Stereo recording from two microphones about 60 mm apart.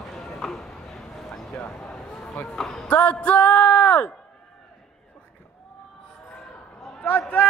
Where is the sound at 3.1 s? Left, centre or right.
Left.